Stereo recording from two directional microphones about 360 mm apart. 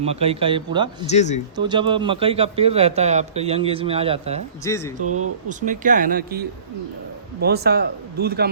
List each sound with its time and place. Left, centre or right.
0.0 s a man's voice: centre
1.0 s speech: centre
1.5 s a man's voice: centre
4.6 s speech: centre
5.0 s speech: right
5.5 s a man's voice: right
7.4 s a man's voice: right